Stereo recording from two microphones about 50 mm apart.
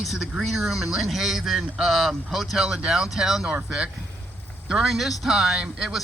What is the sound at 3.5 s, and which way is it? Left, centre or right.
Speech, right.